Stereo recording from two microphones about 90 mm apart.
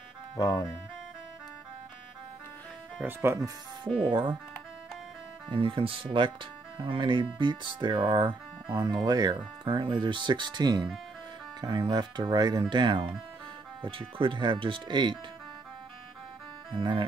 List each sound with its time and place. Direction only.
0.4 s speech: 40° left (ahead or behind)
3.0 s speech: 25° right (ahead or behind)
4.0 s speech: 60° right (ahead or behind)
5.5 s speech: 80° right
6.8 s speech: 65° right (ahead or behind)
9.7 s speech: 65° right (ahead or behind)
16.7 s speech: 70° right (ahead or behind)